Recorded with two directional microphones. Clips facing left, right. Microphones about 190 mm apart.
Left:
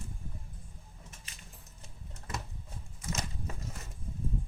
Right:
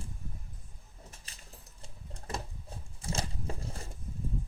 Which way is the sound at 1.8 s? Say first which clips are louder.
Right 3 dB; 30° right (ahead or behind).